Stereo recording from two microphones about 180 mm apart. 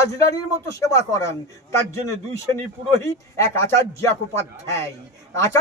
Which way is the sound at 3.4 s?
15° left (ahead or behind).